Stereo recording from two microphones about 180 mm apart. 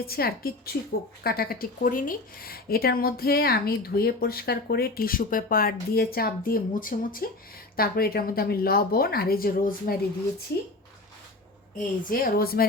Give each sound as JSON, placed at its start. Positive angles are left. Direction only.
{"t": 0.0, "sound": "speech", "side_deg": 55}
{"t": 11.8, "sound": "speech", "side_deg": 50}